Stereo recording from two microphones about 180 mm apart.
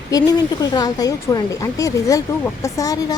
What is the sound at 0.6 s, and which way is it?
Speech, 20° left (ahead or behind).